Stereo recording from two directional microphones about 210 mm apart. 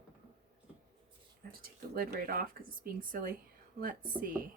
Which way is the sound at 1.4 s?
45° right (ahead or behind).